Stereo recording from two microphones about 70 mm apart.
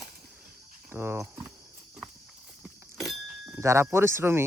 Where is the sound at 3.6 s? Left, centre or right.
Right.